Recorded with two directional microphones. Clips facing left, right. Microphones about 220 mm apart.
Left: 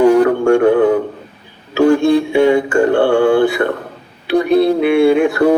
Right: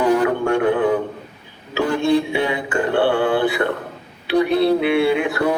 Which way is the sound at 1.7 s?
45° left (ahead or behind).